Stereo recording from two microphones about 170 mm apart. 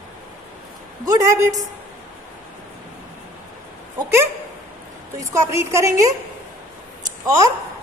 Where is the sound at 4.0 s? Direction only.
15° right (ahead or behind).